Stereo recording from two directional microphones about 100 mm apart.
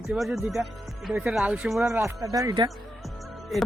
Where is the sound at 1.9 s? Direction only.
30° right (ahead or behind).